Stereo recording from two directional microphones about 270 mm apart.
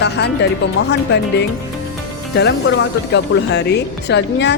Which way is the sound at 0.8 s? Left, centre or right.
Left.